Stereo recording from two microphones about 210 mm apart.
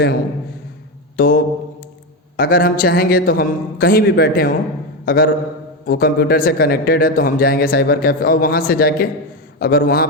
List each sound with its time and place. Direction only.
1.1 s mantra: 45° left (ahead or behind)
2.3 s speech: 45° left (ahead or behind)